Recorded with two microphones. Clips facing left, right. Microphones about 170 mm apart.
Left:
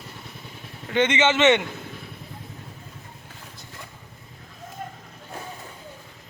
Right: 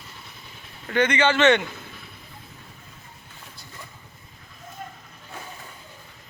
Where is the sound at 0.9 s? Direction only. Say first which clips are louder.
Even; 20° left (ahead or behind).